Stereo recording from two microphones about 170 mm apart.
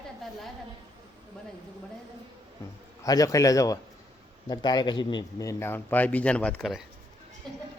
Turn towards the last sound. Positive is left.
turn(degrees=0)  # may be behind; listen again after turning